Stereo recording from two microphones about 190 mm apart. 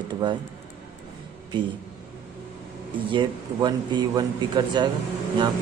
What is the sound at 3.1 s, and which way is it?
Speech, 25° right (ahead or behind).